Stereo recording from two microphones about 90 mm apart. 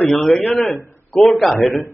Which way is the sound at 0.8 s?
30° left (ahead or behind).